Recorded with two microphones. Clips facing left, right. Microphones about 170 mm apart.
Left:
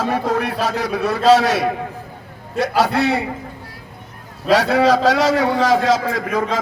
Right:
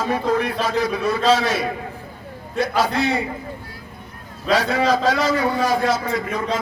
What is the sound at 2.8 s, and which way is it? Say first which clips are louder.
Speech: left 4 dB; 65° left (ahead or behind).